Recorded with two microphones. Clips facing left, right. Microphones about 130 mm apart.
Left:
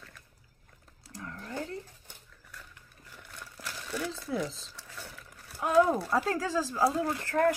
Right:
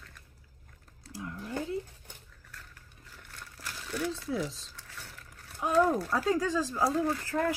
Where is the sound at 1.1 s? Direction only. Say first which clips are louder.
Right 3 dB; 10° right (ahead or behind).